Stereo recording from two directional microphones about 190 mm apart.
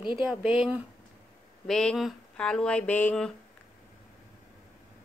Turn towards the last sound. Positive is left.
turn(degrees=5)  # may be behind; listen again after turning